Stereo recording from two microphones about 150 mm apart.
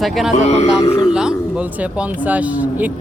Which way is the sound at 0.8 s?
25° left (ahead or behind).